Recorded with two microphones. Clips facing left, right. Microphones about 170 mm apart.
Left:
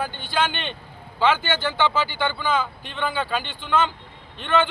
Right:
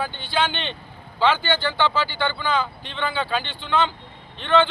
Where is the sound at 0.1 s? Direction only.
45° left (ahead or behind).